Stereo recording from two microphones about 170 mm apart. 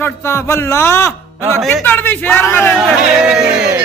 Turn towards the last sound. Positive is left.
turn(degrees=-5)  # may be behind; listen again after turning